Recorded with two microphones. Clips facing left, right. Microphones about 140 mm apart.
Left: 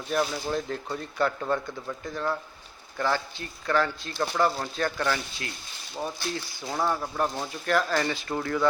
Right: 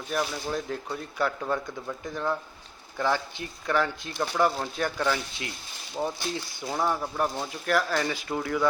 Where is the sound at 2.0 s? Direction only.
15° right (ahead or behind).